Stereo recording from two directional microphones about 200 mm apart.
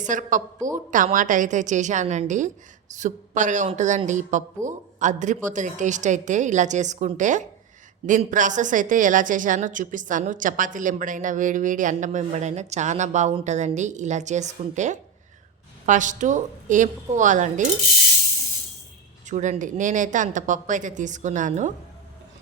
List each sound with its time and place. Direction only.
0.0 s a woman's voice: 40° right (ahead or behind)
19.3 s a woman's voice: 40° right (ahead or behind)